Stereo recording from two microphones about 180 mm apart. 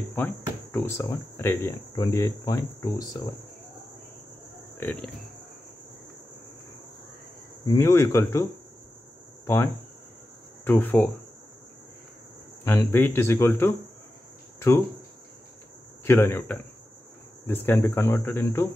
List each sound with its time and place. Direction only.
0.1 s speech: 10° left (ahead or behind)
4.7 s speech: 10° left (ahead or behind)
7.6 s speech: 20° left (ahead or behind)
10.6 s cricket: 10° left (ahead or behind)
12.6 s speech: 15° left (ahead or behind)
16.0 s speech: 15° left (ahead or behind)